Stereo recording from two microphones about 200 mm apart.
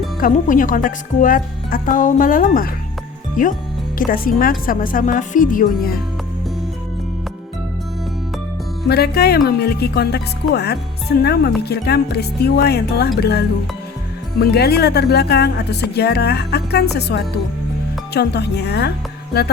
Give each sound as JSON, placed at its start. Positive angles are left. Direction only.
{"t": 0.2, "sound": "speech", "side_deg": 40}
{"t": 8.9, "sound": "speech", "side_deg": 55}